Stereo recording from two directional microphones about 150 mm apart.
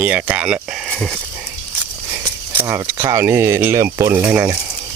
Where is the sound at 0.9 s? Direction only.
5° left (ahead or behind).